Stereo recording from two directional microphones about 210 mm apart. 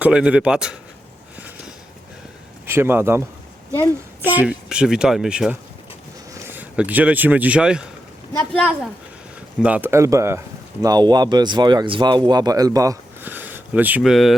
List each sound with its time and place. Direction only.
0.0 s speech: 5° right (ahead or behind)
2.6 s speech: 10° right (ahead or behind)